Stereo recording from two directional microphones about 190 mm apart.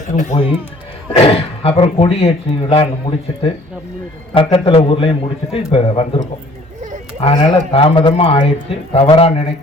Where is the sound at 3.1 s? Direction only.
20° left (ahead or behind).